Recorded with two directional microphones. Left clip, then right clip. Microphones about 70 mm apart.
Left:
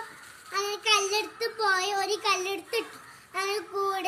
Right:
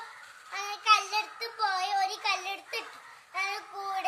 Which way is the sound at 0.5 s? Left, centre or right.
Right.